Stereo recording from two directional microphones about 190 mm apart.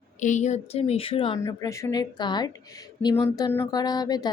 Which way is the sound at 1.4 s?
15° left (ahead or behind).